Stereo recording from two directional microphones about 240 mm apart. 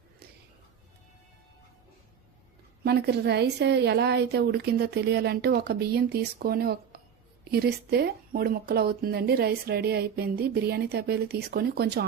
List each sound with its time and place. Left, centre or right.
2.8 s a woman's voice: right